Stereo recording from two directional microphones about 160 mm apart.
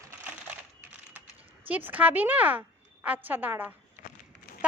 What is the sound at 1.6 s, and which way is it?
A woman's voice, 10° right (ahead or behind).